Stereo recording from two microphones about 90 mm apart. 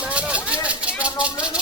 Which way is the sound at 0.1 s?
15° right (ahead or behind).